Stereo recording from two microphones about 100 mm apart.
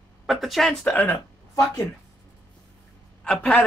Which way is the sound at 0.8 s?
20° left (ahead or behind).